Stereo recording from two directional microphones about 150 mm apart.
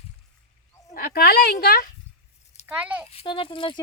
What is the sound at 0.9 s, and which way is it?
Speech, 85° left.